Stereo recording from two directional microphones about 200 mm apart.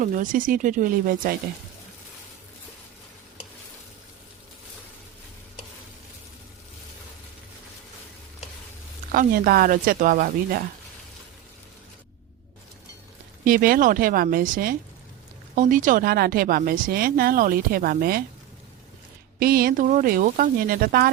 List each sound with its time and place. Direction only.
0.0 s speech: 40° right (ahead or behind)
9.1 s a woman's voice: 45° right (ahead or behind)
13.4 s a woman's voice: 45° right (ahead or behind)
19.4 s a woman's voice: 45° right (ahead or behind)